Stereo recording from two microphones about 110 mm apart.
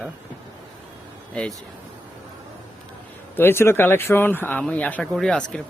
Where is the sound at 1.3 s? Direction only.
10° left (ahead or behind).